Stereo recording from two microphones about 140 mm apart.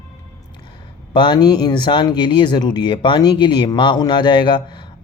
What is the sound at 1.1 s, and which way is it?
Speech, 35° left (ahead or behind).